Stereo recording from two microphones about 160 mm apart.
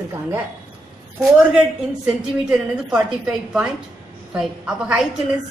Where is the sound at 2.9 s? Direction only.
5° right (ahead or behind).